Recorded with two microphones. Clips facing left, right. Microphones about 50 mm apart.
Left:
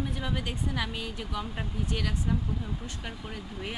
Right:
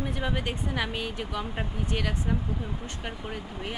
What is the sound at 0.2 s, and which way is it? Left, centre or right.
Speech, right.